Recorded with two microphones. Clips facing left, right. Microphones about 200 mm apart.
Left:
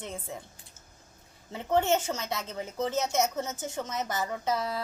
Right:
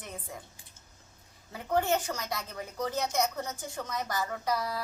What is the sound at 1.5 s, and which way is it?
A woman's voice, 25° left (ahead or behind).